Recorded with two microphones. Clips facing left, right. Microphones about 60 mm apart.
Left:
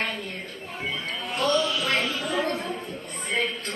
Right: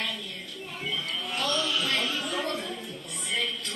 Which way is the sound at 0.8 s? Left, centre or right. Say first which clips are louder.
Left 2 dB; left.